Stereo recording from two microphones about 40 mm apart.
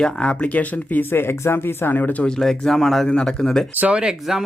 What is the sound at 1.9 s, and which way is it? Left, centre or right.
Speech, left.